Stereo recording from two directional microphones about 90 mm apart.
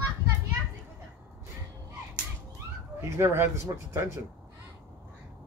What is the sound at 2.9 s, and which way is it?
Speech, 30° right (ahead or behind).